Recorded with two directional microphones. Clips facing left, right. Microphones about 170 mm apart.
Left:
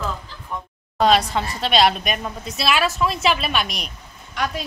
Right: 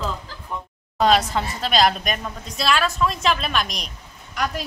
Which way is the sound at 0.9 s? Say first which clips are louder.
Left 1 dB; centre (ahead or behind).